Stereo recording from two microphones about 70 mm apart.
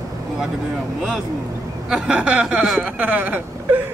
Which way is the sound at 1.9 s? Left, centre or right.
Centre.